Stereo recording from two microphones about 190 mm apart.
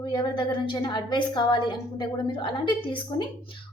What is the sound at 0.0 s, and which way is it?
A woman's voice, 25° left (ahead or behind).